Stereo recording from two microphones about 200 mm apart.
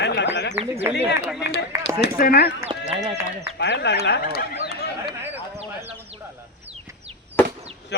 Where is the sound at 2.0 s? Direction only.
50° left (ahead or behind).